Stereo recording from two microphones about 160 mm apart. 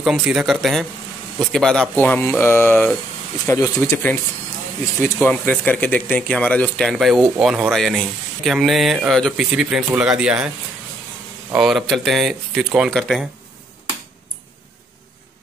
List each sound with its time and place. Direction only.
0.0 s speech: centre (ahead or behind)
3.4 s speech: 20° left (ahead or behind)
5.0 s speech: 15° left (ahead or behind); by 10.5 s 5° right (ahead or behind)
11.5 s speech: centre (ahead or behind)